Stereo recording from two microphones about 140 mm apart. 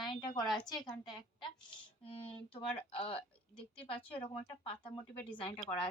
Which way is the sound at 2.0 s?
40° left (ahead or behind).